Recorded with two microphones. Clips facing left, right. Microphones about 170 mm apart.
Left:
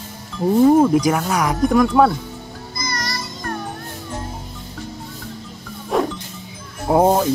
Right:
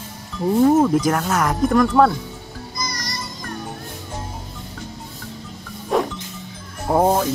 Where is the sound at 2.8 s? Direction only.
60° left (ahead or behind).